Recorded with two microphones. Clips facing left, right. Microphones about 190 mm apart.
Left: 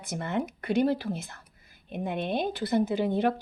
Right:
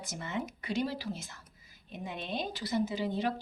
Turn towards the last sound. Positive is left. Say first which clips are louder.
# left 6 dB
turn(degrees=55)  # may be behind; listen again after turning